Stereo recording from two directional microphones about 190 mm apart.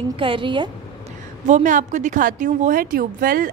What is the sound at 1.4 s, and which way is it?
A woman's voice, 40° right (ahead or behind).